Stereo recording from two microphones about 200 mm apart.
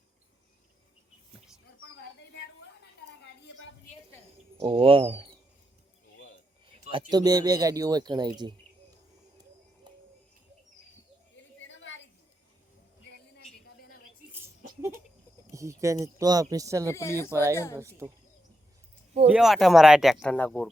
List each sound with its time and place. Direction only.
1.8 s a sound: 55° left (ahead or behind)
4.6 s speech: 25° right (ahead or behind)
7.1 s speech: 20° right (ahead or behind)
9.9 s a sound: 20° right (ahead or behind)
11.3 s a sound: 70° left (ahead or behind)
13.1 s a sound: 55° left (ahead or behind)
14.4 s laughter: 10° right (ahead or behind)
15.5 s speech: 15° right (ahead or behind)
16.9 s speech: 15° left (ahead or behind)
17.2 s speech: 15° right (ahead or behind)
17.5 s speech: 15° left (ahead or behind)
17.7 s speech: 10° right (ahead or behind)
19.3 s speech: centre (ahead or behind)